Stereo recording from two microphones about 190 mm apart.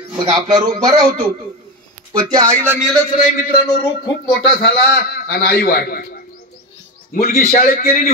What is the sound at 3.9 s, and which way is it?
Speech, 60° left (ahead or behind).